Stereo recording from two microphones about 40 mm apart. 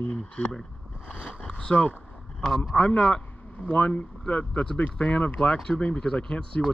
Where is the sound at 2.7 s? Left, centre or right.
Left.